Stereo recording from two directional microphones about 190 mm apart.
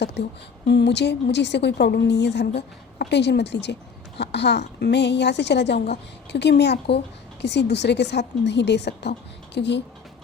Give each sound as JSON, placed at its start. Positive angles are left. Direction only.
{"t": 0.0, "sound": "a woman's voice", "side_deg": 65}